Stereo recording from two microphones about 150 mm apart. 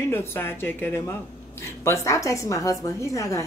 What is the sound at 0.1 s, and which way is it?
A woman's voice, 15° left (ahead or behind).